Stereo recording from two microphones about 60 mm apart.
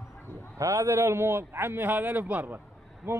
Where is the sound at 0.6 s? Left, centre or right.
Right.